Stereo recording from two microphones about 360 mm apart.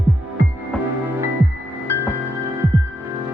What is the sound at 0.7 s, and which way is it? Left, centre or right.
Music, centre.